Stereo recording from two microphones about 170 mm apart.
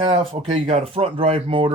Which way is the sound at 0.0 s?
30° right (ahead or behind).